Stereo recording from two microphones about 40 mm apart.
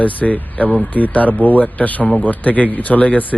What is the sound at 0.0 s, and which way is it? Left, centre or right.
A man's voice, left.